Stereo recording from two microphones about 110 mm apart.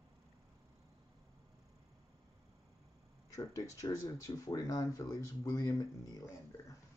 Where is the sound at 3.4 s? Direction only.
30° left (ahead or behind).